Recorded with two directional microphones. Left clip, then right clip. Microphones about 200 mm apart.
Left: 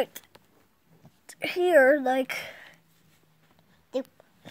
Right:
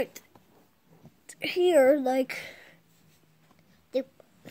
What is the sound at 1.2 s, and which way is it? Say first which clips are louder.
Speech: right 1 dB; 40° left (ahead or behind).